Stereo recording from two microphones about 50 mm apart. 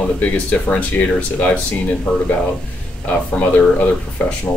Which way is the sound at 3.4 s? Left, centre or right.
Left.